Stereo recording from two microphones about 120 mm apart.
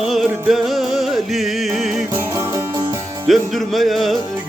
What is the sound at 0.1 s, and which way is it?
Music, centre (ahead or behind).